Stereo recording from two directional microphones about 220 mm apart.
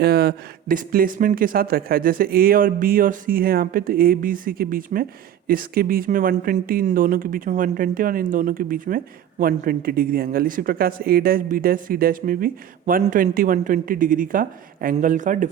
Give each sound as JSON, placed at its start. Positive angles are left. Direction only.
{"t": 0.0, "sound": "speech", "side_deg": -45}